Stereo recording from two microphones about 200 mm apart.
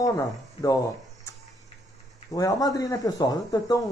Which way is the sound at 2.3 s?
15° left (ahead or behind).